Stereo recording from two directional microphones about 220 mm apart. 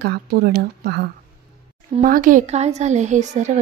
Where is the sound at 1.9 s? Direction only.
35° right (ahead or behind).